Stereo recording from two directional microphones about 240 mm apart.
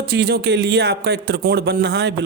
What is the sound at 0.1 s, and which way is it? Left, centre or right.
Speech, right.